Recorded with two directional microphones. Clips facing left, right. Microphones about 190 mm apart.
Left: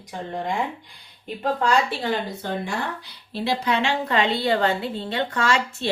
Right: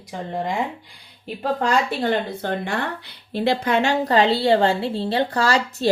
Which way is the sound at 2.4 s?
60° right (ahead or behind).